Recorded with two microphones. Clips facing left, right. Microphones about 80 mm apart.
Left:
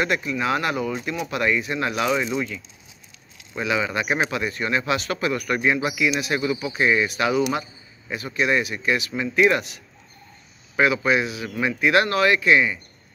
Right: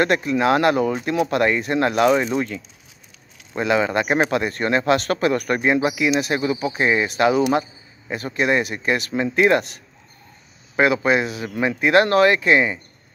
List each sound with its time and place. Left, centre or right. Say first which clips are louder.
0.0 s speech: right 5 dB; right
10.8 s speech: right 2 dB; right